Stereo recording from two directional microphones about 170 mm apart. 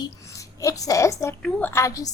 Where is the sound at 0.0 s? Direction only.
20° left (ahead or behind).